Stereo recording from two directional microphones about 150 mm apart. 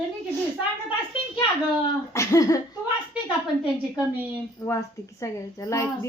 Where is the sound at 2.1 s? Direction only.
20° left (ahead or behind).